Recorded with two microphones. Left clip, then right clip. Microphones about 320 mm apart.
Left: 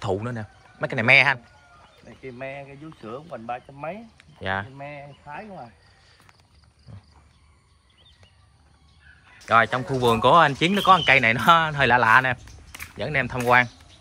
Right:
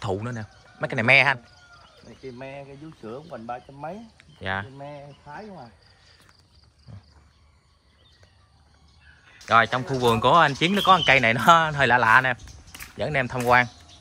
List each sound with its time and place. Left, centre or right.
0.0 s speech: centre
2.0 s speech: centre
4.2 s speech: centre
5.2 s speech: left
6.9 s wild animals: centre
9.5 s speech: centre